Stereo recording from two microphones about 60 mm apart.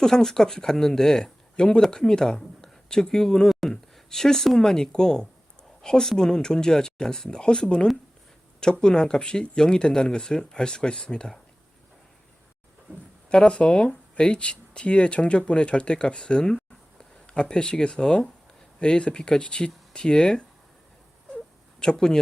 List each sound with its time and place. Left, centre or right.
0.0 s speech: centre
13.3 s speech: centre
21.8 s speech: centre